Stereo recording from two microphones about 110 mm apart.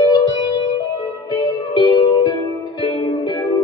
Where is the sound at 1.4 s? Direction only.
50° left (ahead or behind).